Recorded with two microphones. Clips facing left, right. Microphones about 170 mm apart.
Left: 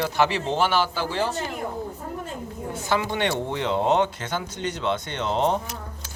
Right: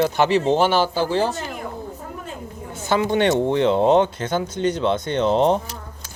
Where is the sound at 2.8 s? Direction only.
20° right (ahead or behind).